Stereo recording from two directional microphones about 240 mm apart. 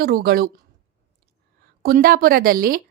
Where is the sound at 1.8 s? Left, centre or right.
Right.